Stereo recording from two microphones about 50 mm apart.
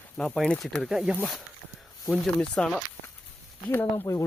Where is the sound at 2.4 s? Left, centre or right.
Centre.